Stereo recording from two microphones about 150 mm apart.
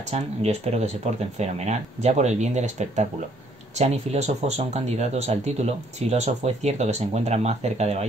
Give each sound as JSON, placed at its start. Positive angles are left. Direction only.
{"t": 0.0, "sound": "speech", "side_deg": -45}